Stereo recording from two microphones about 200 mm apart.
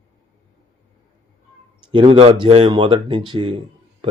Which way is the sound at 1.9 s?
25° right (ahead or behind).